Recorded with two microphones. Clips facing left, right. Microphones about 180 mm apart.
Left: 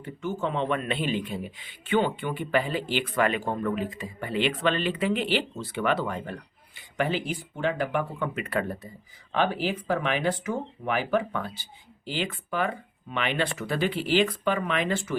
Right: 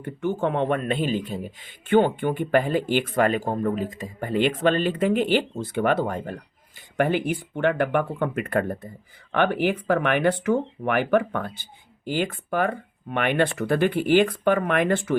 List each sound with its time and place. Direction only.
0.0 s speech: 55° right (ahead or behind)